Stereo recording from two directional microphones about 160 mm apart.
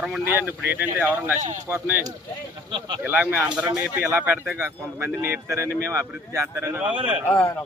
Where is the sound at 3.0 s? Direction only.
10° right (ahead or behind).